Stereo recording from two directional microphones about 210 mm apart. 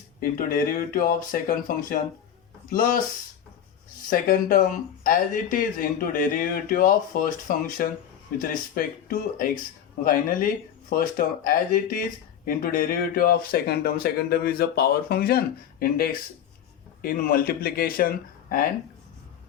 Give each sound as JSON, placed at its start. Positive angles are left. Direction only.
{"t": 0.2, "sound": "speech", "side_deg": 45}
{"t": 4.1, "sound": "speech", "side_deg": 40}